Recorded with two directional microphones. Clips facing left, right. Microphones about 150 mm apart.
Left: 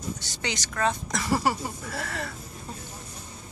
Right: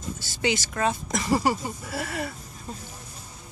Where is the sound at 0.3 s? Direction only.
10° right (ahead or behind).